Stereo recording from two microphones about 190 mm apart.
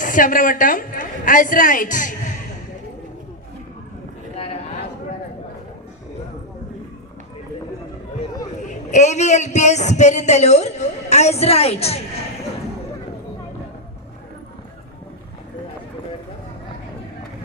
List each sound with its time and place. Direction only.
0.0 s a woman's voice: 45° left (ahead or behind)
4.4 s a sound: 30° left (ahead or behind)
8.6 s a man's voice: 40° left (ahead or behind)